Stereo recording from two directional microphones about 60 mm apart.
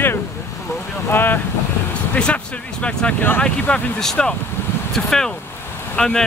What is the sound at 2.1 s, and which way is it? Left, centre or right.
Speech, centre.